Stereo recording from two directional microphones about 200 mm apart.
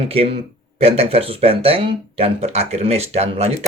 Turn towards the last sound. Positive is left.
turn(degrees=-30)  # may be behind; listen again after turning